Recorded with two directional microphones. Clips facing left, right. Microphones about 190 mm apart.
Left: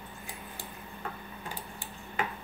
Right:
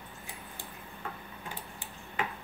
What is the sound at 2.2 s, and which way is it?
Tick-tock, 40° left (ahead or behind).